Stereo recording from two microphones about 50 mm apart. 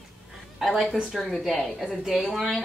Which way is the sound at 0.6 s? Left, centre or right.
Centre.